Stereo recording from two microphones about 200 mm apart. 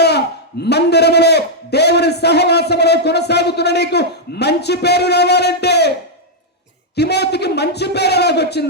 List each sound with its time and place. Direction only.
0.6 s a man's voice: 55° left (ahead or behind)
6.9 s a man's voice: 55° left (ahead or behind)